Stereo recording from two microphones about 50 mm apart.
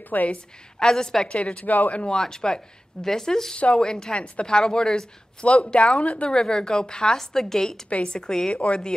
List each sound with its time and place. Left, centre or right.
0.1 s a woman's voice: left
0.7 s speech: centre
1.7 s a woman's voice: left
2.0 s speech: centre
3.5 s a woman's voice: centre
6.2 s speech: centre
7.9 s speech: left